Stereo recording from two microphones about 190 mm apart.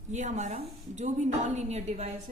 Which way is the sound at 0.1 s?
40° right (ahead or behind).